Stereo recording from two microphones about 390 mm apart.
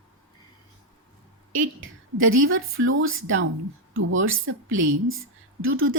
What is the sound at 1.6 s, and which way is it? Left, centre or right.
Speech, right.